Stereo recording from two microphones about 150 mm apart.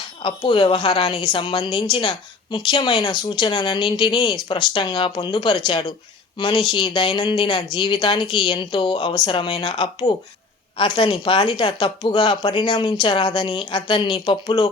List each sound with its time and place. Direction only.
0.2 s a woman's voice: 35° left (ahead or behind)